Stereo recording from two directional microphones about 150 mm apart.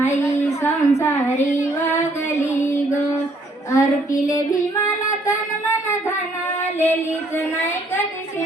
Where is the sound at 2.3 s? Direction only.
20° left (ahead or behind).